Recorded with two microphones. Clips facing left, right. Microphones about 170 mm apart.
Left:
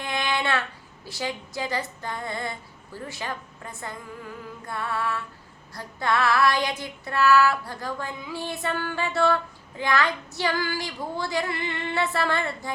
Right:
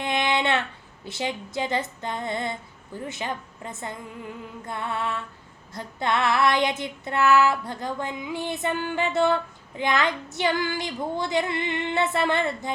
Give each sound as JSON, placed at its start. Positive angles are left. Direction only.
{"t": 0.0, "sound": "child singing", "side_deg": -20}
{"t": 1.0, "sound": "female singing", "side_deg": -20}